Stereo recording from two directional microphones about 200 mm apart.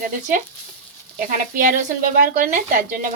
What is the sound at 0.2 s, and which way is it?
Speech, 40° right (ahead or behind).